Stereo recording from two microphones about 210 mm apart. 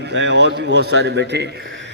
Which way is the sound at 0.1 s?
55° right (ahead or behind).